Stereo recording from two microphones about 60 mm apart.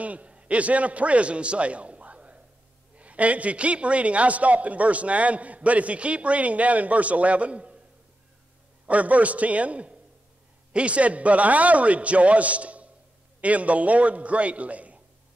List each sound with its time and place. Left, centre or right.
0.0 s a man's voice: right
8.8 s a man's voice: right